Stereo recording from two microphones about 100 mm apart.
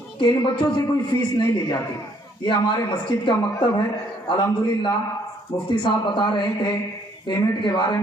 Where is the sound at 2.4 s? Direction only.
50° left (ahead or behind).